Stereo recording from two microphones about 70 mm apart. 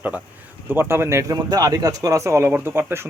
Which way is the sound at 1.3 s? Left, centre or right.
Right.